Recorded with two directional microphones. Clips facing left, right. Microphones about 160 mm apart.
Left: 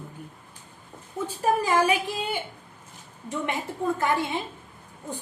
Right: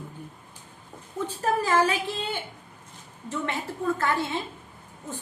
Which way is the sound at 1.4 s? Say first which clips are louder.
Left 1 dB; 15° left (ahead or behind).